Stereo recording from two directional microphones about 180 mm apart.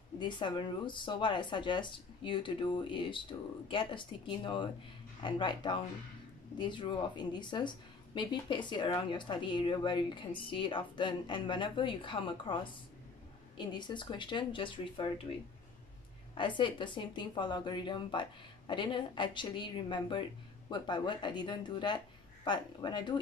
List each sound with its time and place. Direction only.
0.2 s speech: 25° left (ahead or behind)
13.6 s speech: 25° left (ahead or behind)
16.3 s speech: 25° left (ahead or behind)